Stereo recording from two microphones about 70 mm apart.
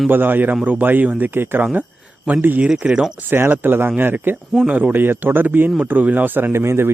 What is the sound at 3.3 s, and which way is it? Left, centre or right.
Speech, right.